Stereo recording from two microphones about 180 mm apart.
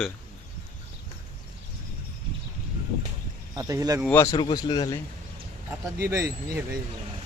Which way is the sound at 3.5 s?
20° right (ahead or behind).